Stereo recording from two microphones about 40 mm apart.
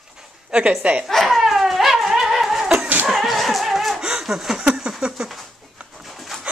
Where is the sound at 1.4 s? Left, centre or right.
Centre.